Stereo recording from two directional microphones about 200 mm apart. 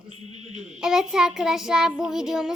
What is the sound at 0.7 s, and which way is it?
Child singing, 5° right (ahead or behind).